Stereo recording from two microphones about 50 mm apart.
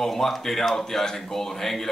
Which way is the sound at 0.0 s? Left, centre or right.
Centre.